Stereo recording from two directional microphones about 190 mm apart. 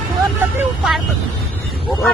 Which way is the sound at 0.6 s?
Centre (ahead or behind).